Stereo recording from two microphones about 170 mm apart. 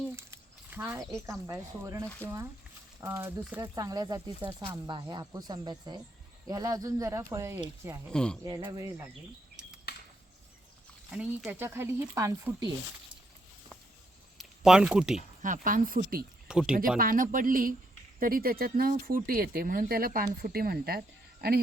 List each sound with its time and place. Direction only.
0.2 s a sound: 15° right (ahead or behind)
1.3 s speech: 20° right (ahead or behind)
8.1 s speech: 5° left (ahead or behind)
8.4 s speech: 20° right (ahead or behind)
9.9 s a sound: 70° left (ahead or behind)
11.1 s speech: 5° right (ahead or behind)
14.3 s speech: 5° right (ahead or behind)
15.4 s speech: 50° right (ahead or behind)
16.5 s speech: 5° right (ahead or behind)
17.0 s speech: 55° right (ahead or behind)